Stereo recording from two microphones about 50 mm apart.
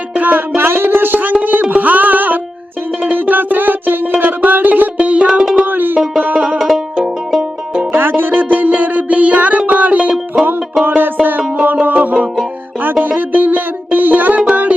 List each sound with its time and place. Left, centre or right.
0.1 s music: right
5.5 s music: right
6.6 s music: centre
7.9 s music: right
10.8 s a sound: right
11.6 s music: right